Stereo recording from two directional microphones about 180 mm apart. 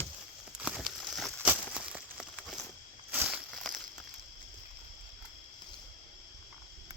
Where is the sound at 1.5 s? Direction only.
5° right (ahead or behind).